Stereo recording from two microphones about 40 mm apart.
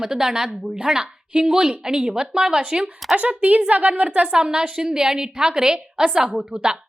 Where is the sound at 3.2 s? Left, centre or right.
Right.